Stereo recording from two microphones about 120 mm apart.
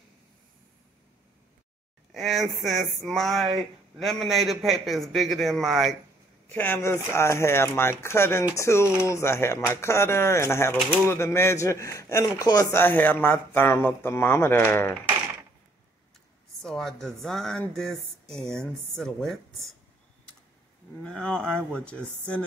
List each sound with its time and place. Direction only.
2.1 s a man's voice: centre (ahead or behind)
6.5 s speech: 15° left (ahead or behind)
12.7 s a man's voice: 15° left (ahead or behind)
16.6 s a man's voice: 5° left (ahead or behind)
21.0 s a man's voice: 5° left (ahead or behind)